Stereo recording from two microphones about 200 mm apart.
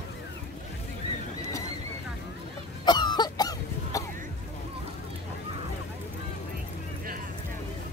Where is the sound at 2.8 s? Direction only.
20° left (ahead or behind).